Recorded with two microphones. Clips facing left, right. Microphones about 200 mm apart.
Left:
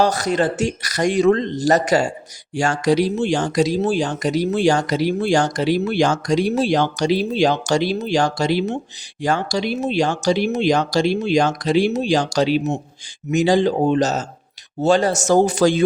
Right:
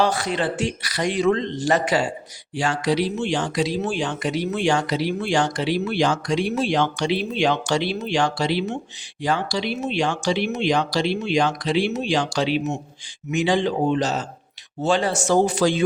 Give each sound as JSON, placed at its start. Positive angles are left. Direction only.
{"t": 0.0, "sound": "speech", "side_deg": 40}